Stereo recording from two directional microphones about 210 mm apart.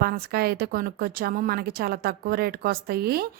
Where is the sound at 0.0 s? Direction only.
45° right (ahead or behind).